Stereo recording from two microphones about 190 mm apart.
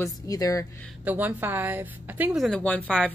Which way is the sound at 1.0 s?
10° right (ahead or behind).